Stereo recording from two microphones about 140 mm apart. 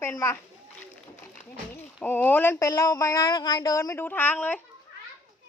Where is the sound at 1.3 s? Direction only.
10° left (ahead or behind).